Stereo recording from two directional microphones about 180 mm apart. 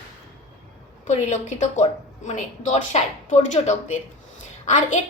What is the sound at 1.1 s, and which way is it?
A woman's voice, 40° left (ahead or behind).